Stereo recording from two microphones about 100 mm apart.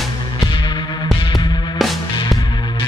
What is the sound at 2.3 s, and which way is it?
Music, 50° left (ahead or behind).